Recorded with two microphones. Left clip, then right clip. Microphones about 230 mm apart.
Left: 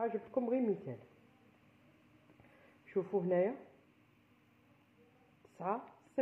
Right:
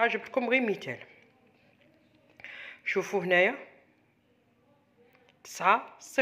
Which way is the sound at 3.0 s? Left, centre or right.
Right.